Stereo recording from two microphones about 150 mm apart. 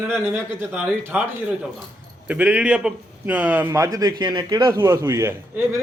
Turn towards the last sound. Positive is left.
turn(degrees=-20)  # may be behind; listen again after turning